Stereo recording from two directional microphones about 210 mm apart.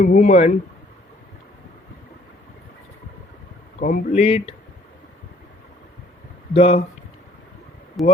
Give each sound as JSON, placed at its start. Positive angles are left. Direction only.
{"t": 0.0, "sound": "speech", "side_deg": 35}
{"t": 3.8, "sound": "speech", "side_deg": 40}
{"t": 4.2, "sound": "speech", "side_deg": 30}
{"t": 6.5, "sound": "speech", "side_deg": 25}
{"t": 8.0, "sound": "speech", "side_deg": 0}